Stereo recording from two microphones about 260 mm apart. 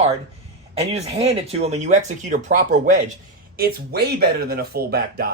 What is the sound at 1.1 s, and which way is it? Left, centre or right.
Speech, right.